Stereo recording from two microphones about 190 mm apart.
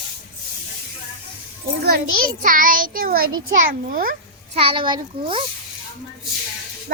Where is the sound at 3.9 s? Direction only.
50° right (ahead or behind).